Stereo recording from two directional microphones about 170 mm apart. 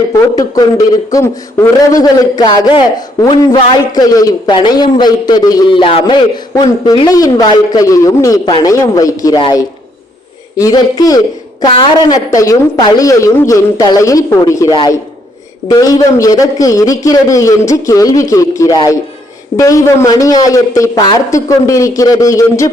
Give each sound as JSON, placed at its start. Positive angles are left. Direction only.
{"t": 0.1, "sound": "a man's voice", "side_deg": 20}